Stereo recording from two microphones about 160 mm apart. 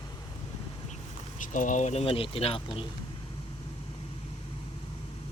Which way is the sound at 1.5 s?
50° left (ahead or behind).